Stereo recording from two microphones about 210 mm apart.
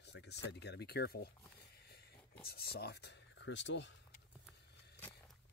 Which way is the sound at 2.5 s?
50° left (ahead or behind).